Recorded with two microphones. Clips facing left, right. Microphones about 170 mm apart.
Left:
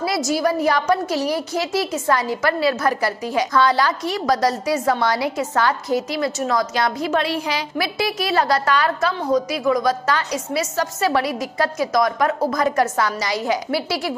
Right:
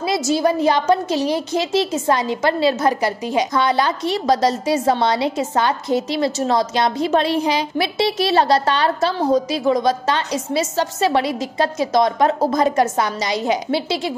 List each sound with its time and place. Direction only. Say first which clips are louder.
0.3 s a woman's voice: right 3 dB; 25° right (ahead or behind)